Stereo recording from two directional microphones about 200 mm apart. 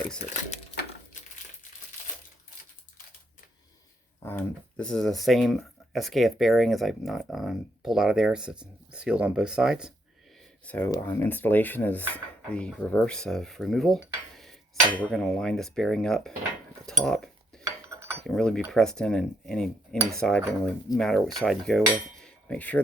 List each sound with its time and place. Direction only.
0.3 s a sound: 35° left (ahead or behind)
4.2 s speech: 10° left (ahead or behind)
10.7 s speech: 5° left (ahead or behind)
14.0 s dishes: centre (ahead or behind)
15.1 s speech: centre (ahead or behind)
16.8 s cutlery: centre (ahead or behind)
17.6 s a sound: 15° right (ahead or behind)
18.3 s speech: 5° left (ahead or behind)
21.3 s cutlery: centre (ahead or behind)